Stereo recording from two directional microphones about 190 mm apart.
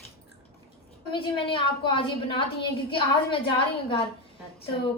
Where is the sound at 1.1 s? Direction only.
25° left (ahead or behind).